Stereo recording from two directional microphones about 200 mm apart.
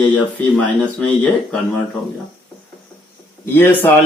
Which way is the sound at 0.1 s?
5° left (ahead or behind).